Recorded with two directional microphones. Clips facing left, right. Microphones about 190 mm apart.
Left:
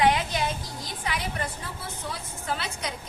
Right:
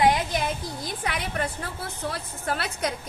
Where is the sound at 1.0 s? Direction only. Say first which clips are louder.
Right 2 dB; 55° right (ahead or behind).